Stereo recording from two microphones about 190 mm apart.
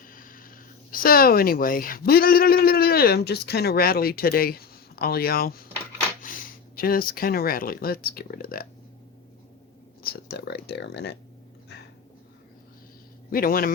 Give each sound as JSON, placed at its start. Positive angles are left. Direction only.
{"t": 0.1, "sound": "a sound", "side_deg": 45}
{"t": 0.9, "sound": "speech", "side_deg": 50}
{"t": 10.0, "sound": "speech", "side_deg": 55}
{"t": 13.3, "sound": "speech", "side_deg": 50}